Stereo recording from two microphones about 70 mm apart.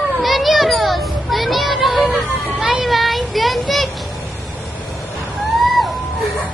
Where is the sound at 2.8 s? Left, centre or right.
Centre.